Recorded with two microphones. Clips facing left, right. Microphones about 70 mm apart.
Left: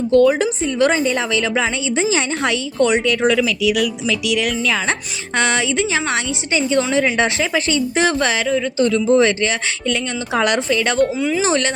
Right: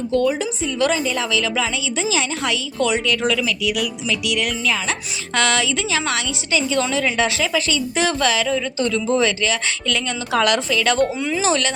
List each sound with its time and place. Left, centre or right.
0.1 s a woman's voice: left
0.8 s a woman's voice: left
4.1 s speech: right
4.4 s speech: left
5.4 s a woman's voice: left
8.4 s a woman's voice: centre
9.0 s a woman's voice: left
9.8 s a woman's voice: left
11.0 s speech: centre
11.4 s a woman's voice: left